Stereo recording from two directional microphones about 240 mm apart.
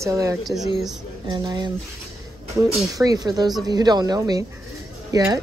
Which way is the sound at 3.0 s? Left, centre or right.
Centre.